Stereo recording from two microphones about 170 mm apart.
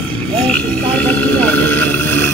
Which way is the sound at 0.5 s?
10° left (ahead or behind).